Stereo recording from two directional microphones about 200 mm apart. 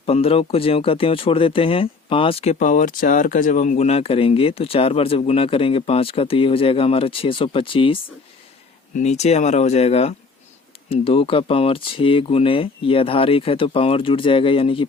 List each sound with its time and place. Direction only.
0.0 s speech: 30° left (ahead or behind)
9.0 s speech: 35° left (ahead or behind)